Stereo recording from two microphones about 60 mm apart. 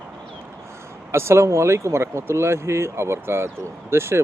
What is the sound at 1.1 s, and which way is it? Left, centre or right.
Speech, right.